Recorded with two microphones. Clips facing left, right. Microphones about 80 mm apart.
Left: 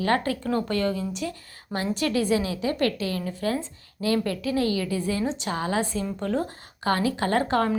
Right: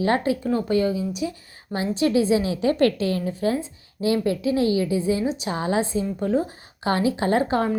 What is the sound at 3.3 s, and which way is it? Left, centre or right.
A woman's voice, right.